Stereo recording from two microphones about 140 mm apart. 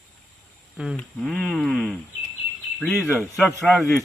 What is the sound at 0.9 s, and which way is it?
Speech, 5° left (ahead or behind).